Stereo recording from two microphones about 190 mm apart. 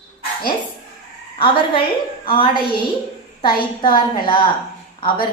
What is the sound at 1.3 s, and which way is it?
Speech, 30° left (ahead or behind).